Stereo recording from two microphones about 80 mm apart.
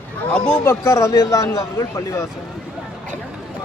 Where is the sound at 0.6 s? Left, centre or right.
Left.